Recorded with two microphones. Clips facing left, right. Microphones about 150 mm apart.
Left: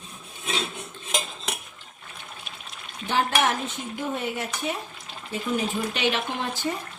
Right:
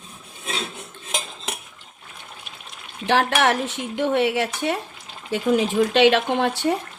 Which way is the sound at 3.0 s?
75° right (ahead or behind).